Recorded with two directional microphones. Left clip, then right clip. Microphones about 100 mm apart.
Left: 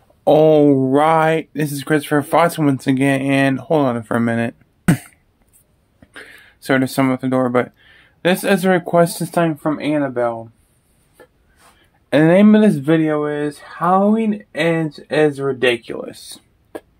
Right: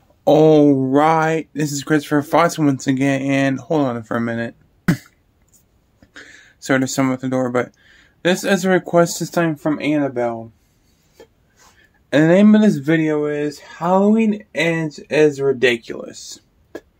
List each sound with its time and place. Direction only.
0.2 s speech: 5° left (ahead or behind)
4.0 s speech: 30° left (ahead or behind)
5.9 s speech: 20° left (ahead or behind)
9.3 s speech: 5° left (ahead or behind)
12.1 s speech: 25° left (ahead or behind)
12.8 s speech: 5° left (ahead or behind)
14.6 s speech: 20° right (ahead or behind)
14.9 s speech: centre (ahead or behind)
16.1 s speech: 25° left (ahead or behind)